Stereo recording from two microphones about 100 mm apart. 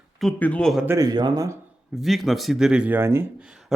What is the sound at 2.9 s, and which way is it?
Speech, 25° right (ahead or behind).